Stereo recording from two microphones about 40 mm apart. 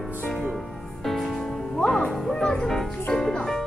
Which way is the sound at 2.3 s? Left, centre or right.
Centre.